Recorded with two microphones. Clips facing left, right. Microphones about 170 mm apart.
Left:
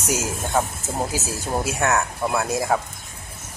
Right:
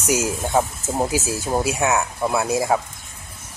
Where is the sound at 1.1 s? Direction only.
10° right (ahead or behind).